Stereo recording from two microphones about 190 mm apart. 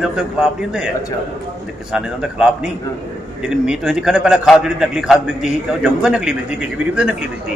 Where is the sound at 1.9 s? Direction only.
5° right (ahead or behind).